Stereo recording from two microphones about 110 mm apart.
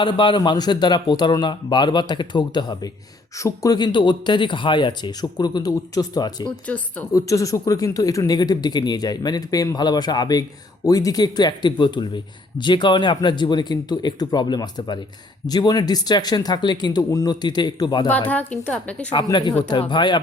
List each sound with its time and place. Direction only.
0.0 s speech: 45° left (ahead or behind)
3.3 s speech: 30° left (ahead or behind)
18.3 s a woman's voice: 15° left (ahead or behind)
19.1 s speech: 45° left (ahead or behind)